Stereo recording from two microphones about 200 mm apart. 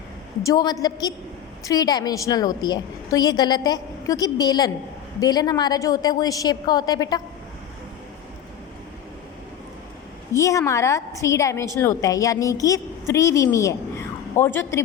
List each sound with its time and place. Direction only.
0.4 s a woman's voice: 20° left (ahead or behind)
10.3 s a woman's voice: 15° left (ahead or behind)